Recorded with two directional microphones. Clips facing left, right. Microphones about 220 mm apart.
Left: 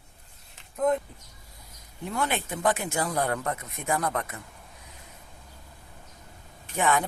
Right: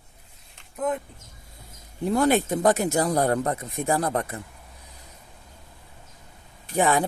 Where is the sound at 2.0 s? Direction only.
40° right (ahead or behind).